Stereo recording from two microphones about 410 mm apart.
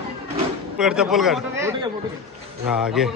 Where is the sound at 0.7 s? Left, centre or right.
Centre.